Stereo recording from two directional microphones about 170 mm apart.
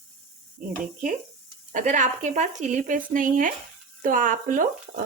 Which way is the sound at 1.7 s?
50° right (ahead or behind).